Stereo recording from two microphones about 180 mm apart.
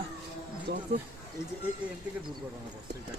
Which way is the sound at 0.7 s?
70° right (ahead or behind).